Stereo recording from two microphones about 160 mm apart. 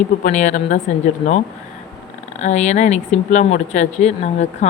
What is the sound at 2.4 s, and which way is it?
Speech, 45° left (ahead or behind).